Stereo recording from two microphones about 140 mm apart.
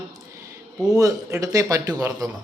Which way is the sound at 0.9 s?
25° right (ahead or behind).